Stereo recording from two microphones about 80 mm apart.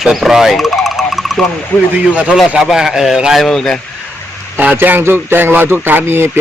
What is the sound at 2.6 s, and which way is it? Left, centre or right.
Speech, centre.